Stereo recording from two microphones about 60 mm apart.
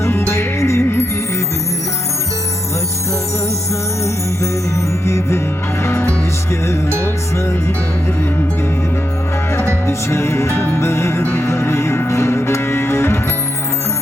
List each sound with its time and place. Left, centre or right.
0.0 s music: left
5.0 s music: left
9.8 s music: left